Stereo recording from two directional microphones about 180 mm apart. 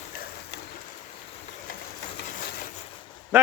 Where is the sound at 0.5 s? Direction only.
70° left (ahead or behind).